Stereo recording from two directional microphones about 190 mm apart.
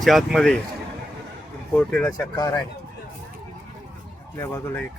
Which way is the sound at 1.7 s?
5° left (ahead or behind).